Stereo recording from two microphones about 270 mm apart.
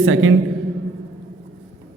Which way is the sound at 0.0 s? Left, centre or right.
Right.